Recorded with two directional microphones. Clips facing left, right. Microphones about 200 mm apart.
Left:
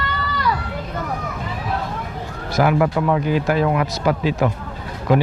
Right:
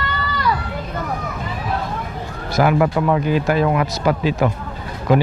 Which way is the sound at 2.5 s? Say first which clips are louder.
Right 1 dB; 20° right (ahead or behind).